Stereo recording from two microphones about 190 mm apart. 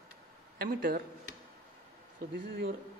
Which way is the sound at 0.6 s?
50° right (ahead or behind).